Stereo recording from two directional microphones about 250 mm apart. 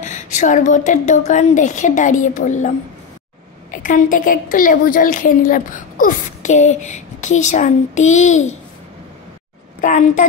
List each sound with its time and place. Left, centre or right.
0.0 s a woman's voice: left
3.7 s a woman's voice: left
9.8 s a woman's voice: left